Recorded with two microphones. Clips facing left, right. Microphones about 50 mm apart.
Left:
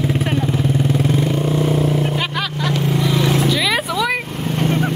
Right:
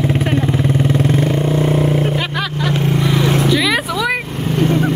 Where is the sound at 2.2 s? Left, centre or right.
Centre.